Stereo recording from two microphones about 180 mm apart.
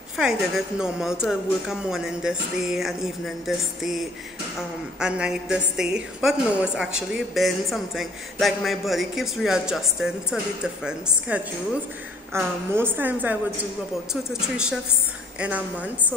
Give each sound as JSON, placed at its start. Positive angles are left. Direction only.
{"t": 0.2, "sound": "a man's voice", "side_deg": -5}
{"t": 15.3, "sound": "a woman's voice", "side_deg": -5}